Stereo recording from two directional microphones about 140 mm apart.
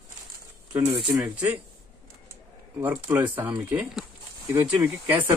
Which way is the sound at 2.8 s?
15° right (ahead or behind).